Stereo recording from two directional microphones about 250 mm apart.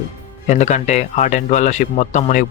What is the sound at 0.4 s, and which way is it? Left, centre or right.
Speech, left.